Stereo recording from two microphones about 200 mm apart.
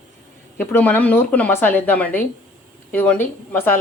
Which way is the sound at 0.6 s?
10° left (ahead or behind).